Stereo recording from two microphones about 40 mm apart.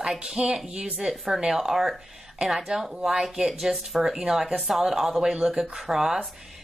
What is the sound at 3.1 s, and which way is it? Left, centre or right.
A woman's voice, centre.